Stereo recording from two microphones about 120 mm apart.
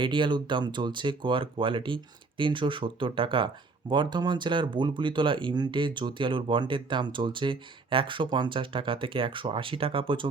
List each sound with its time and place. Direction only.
0.0 s speech: 40° right (ahead or behind)